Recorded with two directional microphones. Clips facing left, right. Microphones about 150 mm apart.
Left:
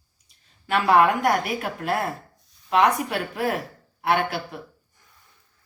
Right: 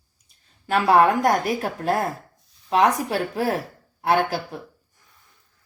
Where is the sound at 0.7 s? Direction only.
35° right (ahead or behind).